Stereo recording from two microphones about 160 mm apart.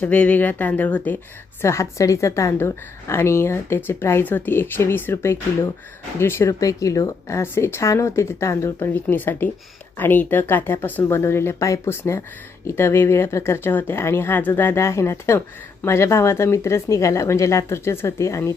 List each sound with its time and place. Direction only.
0.0 s a woman's voice: 10° left (ahead or behind)